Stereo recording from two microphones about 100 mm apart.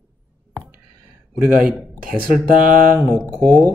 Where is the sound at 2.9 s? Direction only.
20° right (ahead or behind).